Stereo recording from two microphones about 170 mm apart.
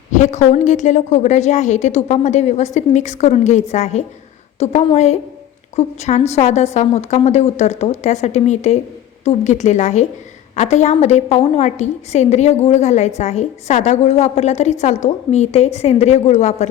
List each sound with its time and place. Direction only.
0.1 s a woman's voice: 45° left (ahead or behind)